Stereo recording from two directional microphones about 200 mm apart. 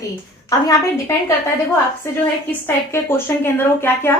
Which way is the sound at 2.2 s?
10° left (ahead or behind).